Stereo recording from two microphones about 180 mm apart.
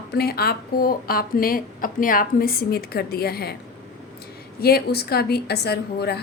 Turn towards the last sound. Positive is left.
turn(degrees=65)  # may be behind; listen again after turning